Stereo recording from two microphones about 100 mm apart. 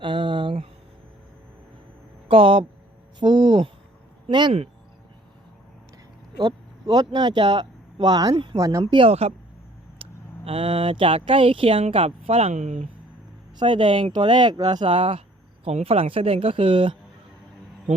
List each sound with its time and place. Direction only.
0.0 s a sound: 55° right (ahead or behind)
2.2 s speech: 65° right (ahead or behind)
3.2 s speech: 50° right (ahead or behind)
6.3 s speech: 45° right (ahead or behind)
8.8 s speech: 55° right (ahead or behind)
9.0 s speech: 90° right
10.0 s speech: 65° right (ahead or behind); by 12.9 s 85° right
13.6 s speech: 55° right (ahead or behind)
15.6 s speech: 75° right (ahead or behind); by 16.9 s 55° right (ahead or behind)